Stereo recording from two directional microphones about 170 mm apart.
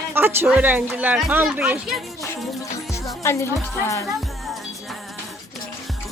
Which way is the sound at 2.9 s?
15° left (ahead or behind).